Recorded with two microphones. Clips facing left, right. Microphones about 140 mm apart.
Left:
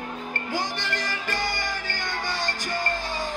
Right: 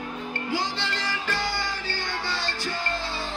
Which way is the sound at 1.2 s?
15° left (ahead or behind).